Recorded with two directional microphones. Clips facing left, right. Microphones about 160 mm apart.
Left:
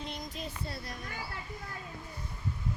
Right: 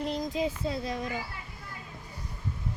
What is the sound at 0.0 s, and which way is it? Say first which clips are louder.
Speech: right 10 dB; 90° right.